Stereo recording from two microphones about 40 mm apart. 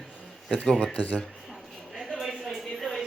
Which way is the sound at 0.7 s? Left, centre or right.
Centre.